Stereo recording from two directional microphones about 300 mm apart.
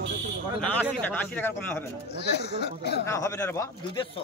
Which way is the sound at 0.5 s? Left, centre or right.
Centre.